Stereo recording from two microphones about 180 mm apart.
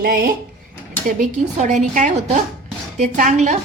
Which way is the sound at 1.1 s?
45° right (ahead or behind).